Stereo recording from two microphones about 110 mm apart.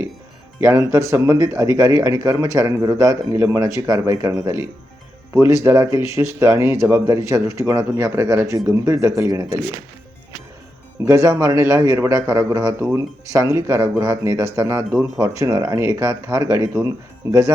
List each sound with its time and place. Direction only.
0.6 s speech: 25° right (ahead or behind)
11.0 s a man's voice: 25° right (ahead or behind)